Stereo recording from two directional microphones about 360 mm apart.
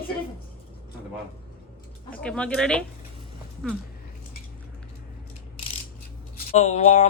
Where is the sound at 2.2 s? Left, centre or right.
Centre.